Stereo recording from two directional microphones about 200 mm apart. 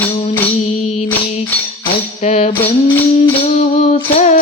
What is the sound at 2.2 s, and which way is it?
Music, 35° left (ahead or behind).